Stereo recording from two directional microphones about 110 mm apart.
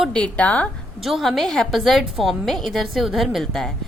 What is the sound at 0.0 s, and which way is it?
Speech, 10° left (ahead or behind).